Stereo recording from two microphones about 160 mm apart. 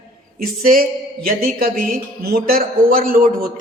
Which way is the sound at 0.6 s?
65° right (ahead or behind).